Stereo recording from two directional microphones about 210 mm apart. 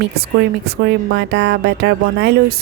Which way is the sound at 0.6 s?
50° right (ahead or behind).